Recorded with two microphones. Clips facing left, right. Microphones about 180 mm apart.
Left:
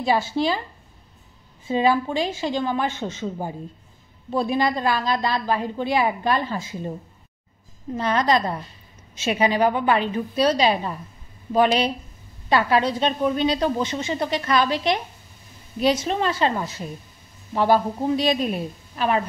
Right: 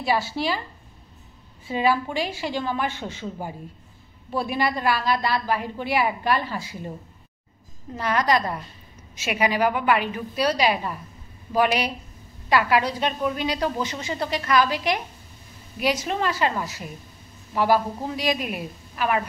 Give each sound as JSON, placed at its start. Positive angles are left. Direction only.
{"t": 0.0, "sound": "a woman's voice", "side_deg": 20}
{"t": 1.7, "sound": "a woman's voice", "side_deg": 25}
{"t": 7.9, "sound": "a woman's voice", "side_deg": 25}